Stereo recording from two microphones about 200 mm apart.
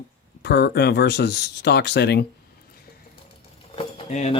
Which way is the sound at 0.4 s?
55° left (ahead or behind).